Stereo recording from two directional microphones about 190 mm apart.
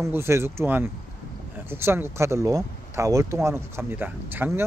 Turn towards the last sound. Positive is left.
turn(degrees=-10)  # may be behind; listen again after turning